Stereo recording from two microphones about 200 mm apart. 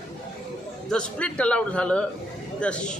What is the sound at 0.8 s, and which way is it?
A man's voice, 5° left (ahead or behind).